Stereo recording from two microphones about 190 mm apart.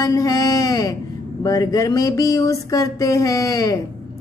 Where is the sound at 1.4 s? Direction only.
20° left (ahead or behind).